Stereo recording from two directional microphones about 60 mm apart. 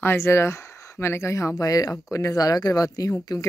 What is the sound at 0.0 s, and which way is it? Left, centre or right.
Speech, left.